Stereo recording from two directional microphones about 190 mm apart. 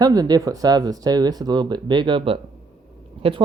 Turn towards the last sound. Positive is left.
turn(degrees=-25)  # may be behind; listen again after turning